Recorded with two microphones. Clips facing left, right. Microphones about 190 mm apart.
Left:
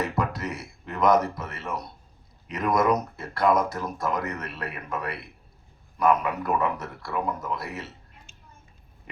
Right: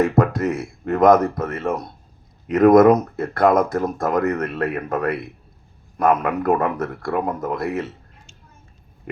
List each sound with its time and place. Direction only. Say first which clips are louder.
0.0 s speech: right 10 dB; 50° right (ahead or behind)